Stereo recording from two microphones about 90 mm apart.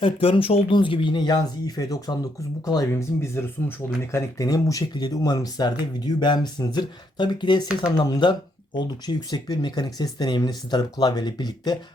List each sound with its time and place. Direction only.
0.0 s speech: 90° left; by 2.1 s 45° left (ahead or behind)
2.9 s speech: 30° left (ahead or behind); by 11.8 s 50° left (ahead or behind)